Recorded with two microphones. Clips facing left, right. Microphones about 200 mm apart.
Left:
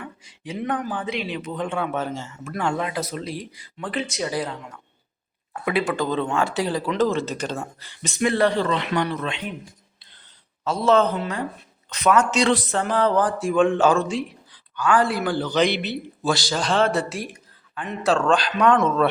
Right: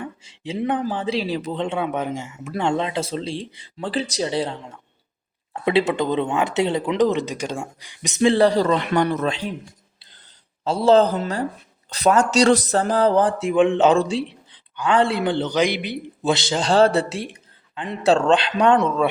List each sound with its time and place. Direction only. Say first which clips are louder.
0.0 s speech: right 5 dB; 25° right (ahead or behind)
1.6 s speech: even; 20° right (ahead or behind)
10.6 s a man's voice: right 3 dB; 30° right (ahead or behind)
15.5 s speech: even; 10° right (ahead or behind); by 18.8 s 30° right (ahead or behind)
18.8 s speech: even; 15° right (ahead or behind)